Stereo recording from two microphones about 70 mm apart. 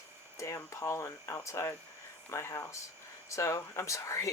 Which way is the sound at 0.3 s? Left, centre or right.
Left.